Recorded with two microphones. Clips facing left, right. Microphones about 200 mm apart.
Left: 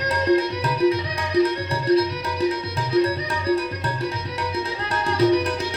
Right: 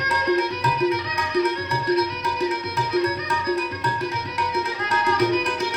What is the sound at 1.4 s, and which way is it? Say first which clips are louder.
Music: left 2 dB; 30° left (ahead or behind).